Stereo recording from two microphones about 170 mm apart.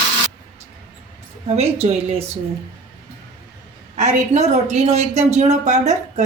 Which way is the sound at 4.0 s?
45° right (ahead or behind).